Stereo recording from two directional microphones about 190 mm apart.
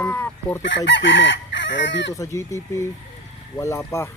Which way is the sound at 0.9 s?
70° left (ahead or behind).